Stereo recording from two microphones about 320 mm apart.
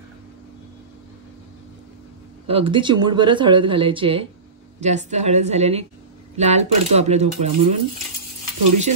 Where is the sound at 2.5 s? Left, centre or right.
Centre.